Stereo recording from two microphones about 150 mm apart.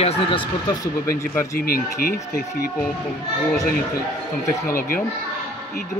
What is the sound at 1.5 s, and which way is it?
Speech, 75° left (ahead or behind).